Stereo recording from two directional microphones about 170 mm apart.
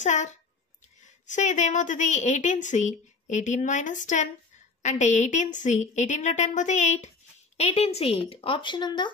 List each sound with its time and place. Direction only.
0.0 s a woman's voice: 45° left (ahead or behind); by 9.1 s 25° left (ahead or behind)